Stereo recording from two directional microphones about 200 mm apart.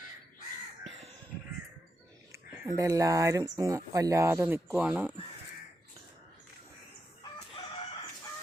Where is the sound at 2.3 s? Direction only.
15° right (ahead or behind).